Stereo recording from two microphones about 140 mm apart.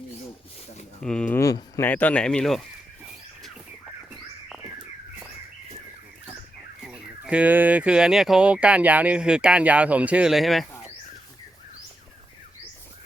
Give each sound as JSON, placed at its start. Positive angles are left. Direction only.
{"t": 1.0, "sound": "speech", "side_deg": 5}
{"t": 1.4, "sound": "a sound", "side_deg": 25}
{"t": 1.9, "sound": "speech", "side_deg": 10}
{"t": 6.8, "sound": "speech", "side_deg": -5}